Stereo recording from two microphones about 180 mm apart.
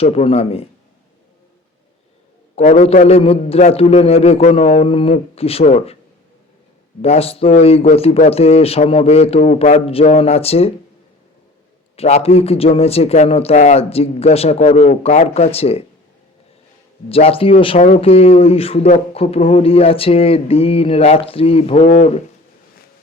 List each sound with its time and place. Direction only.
0.0 s a man's voice: 35° left (ahead or behind)
2.6 s a man's voice: 45° left (ahead or behind)
7.0 s a man's voice: 35° left (ahead or behind)
11.9 s a man's voice: 35° left (ahead or behind)
17.1 s a man's voice: 30° left (ahead or behind)
21.8 s speech: 50° left (ahead or behind)